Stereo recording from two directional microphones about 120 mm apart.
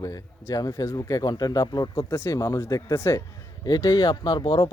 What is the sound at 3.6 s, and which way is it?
Speech, 30° left (ahead or behind).